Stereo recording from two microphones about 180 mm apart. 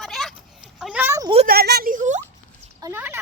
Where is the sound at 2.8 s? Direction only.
10° right (ahead or behind).